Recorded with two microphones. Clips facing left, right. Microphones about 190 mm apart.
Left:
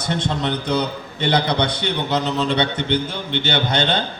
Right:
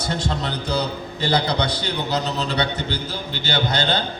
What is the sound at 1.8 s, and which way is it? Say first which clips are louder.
A man's voice: left 3 dB; 25° left (ahead or behind).